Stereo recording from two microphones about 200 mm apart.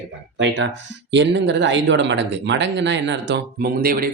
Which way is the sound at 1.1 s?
60° right (ahead or behind).